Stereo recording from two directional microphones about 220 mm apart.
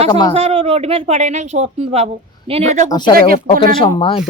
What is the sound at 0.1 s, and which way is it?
Speech, 20° left (ahead or behind).